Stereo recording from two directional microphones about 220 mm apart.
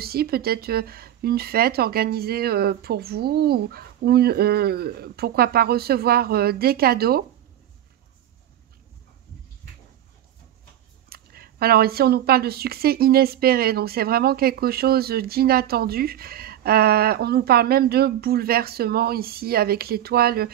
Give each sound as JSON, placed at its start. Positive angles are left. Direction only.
{"t": 0.0, "sound": "speech", "side_deg": -45}
{"t": 11.1, "sound": "speech", "side_deg": -45}